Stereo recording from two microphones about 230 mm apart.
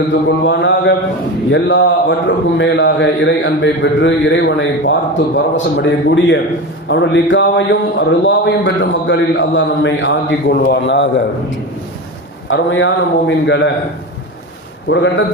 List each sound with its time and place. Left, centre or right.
0.4 s speech: left
12.5 s speech: left
14.8 s speech: left